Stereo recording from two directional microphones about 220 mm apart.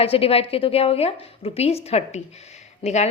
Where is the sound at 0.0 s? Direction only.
25° left (ahead or behind).